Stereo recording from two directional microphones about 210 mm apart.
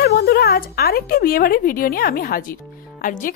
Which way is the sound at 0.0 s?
50° left (ahead or behind).